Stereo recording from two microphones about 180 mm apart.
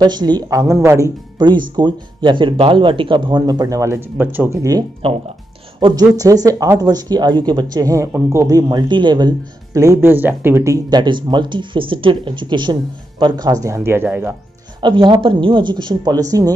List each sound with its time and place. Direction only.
0.0 s speech: 25° right (ahead or behind)
5.0 s speech: 30° right (ahead or behind); by 14.3 s 10° right (ahead or behind)
14.8 s speech: 25° right (ahead or behind)